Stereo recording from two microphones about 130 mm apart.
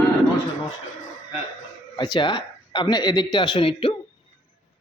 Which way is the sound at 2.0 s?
35° left (ahead or behind).